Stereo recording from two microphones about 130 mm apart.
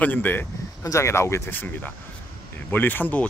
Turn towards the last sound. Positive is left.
turn(degrees=15)  # may be behind; listen again after turning